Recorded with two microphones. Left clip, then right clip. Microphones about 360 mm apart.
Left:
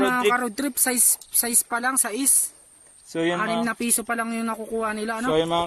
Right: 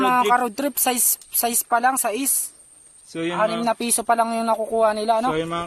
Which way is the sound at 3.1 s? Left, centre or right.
Centre.